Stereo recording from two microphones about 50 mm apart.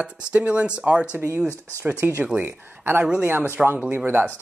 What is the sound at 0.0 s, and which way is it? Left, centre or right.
Speech, right.